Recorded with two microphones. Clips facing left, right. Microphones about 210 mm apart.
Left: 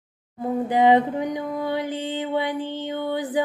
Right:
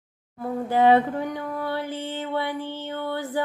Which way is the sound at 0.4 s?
20° left (ahead or behind).